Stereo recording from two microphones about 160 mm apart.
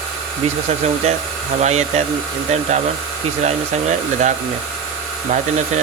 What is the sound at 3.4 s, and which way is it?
Speech, 45° right (ahead or behind).